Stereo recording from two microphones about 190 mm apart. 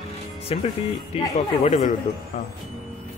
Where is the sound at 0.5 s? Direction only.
30° left (ahead or behind).